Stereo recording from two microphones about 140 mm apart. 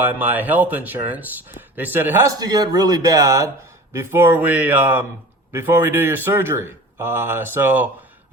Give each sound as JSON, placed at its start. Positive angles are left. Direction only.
{"t": 0.0, "sound": "speech", "side_deg": -15}